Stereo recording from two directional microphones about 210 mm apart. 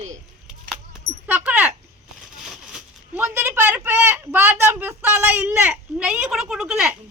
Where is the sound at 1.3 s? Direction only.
5° right (ahead or behind).